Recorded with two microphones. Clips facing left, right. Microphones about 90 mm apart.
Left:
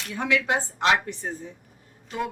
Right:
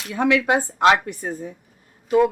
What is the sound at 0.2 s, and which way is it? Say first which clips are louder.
A woman's voice: right 6 dB; 50° right (ahead or behind).